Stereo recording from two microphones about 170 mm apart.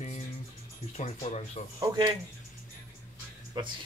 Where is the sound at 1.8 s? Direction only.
25° right (ahead or behind).